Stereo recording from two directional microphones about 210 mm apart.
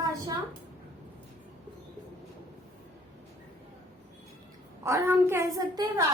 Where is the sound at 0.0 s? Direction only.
15° right (ahead or behind).